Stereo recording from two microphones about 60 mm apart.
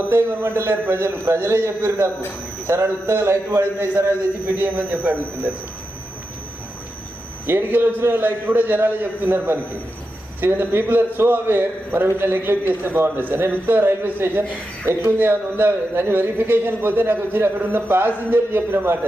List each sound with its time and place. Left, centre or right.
0.1 s a man's voice: right
4.4 s a man's voice: right
7.4 s a man's voice: right